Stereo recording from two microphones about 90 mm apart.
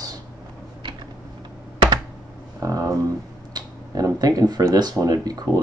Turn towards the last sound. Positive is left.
turn(degrees=-45)  # may be behind; listen again after turning